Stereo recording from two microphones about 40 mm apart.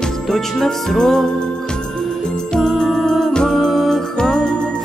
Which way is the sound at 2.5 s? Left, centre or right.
Centre.